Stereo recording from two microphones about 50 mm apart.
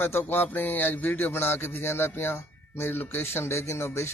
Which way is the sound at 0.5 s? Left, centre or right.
Left.